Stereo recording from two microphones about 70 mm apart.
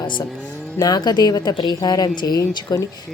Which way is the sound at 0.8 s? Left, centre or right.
Left.